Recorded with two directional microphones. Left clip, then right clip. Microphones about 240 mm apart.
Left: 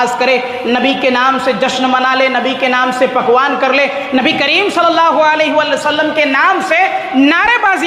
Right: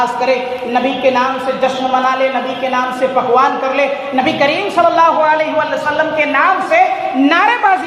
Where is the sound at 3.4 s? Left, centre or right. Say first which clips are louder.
Left 1 dB; left.